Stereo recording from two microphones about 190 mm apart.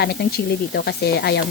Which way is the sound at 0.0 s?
55° left (ahead or behind).